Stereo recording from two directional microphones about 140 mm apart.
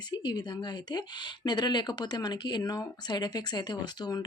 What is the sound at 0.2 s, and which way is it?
Speech, 30° left (ahead or behind).